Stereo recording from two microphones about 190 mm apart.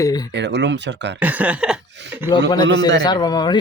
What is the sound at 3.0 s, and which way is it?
Speech, 20° left (ahead or behind).